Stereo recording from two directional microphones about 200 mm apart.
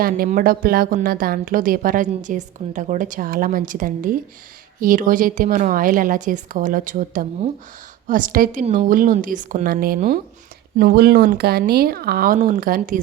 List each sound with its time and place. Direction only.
0.0 s a woman's voice: 45° right (ahead or behind)